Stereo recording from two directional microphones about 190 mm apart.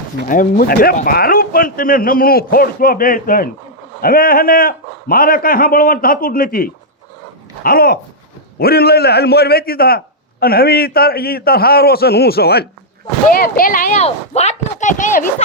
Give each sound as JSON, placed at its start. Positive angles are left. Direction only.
{"t": 0.3, "sound": "a man's voice", "side_deg": 45}